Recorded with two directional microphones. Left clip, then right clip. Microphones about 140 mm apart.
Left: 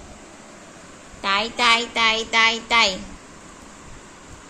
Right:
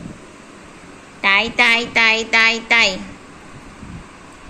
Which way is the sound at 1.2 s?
5° right (ahead or behind).